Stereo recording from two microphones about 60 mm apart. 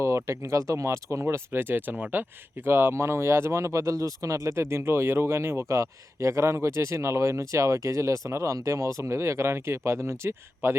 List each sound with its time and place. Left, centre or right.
0.0 s speech: right
1.5 s speech: right